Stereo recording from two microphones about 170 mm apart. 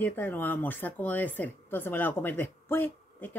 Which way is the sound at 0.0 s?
10° left (ahead or behind).